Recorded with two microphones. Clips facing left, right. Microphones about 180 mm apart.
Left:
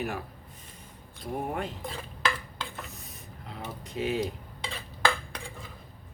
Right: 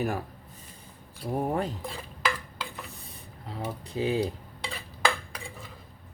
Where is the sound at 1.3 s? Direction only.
35° right (ahead or behind).